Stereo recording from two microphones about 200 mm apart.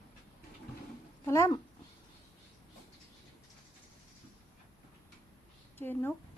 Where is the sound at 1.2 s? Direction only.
15° left (ahead or behind).